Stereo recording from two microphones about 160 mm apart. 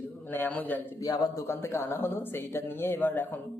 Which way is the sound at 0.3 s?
10° left (ahead or behind).